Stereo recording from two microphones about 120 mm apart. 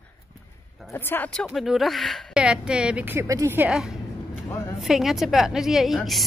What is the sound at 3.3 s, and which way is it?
Speech, 25° right (ahead or behind).